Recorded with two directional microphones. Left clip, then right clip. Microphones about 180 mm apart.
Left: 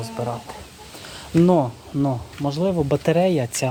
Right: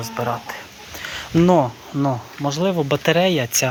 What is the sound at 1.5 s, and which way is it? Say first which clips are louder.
Speech: right 3 dB; 20° right (ahead or behind).